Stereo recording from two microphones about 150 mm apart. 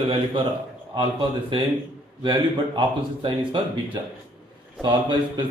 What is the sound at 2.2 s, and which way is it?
Speech, 35° right (ahead or behind).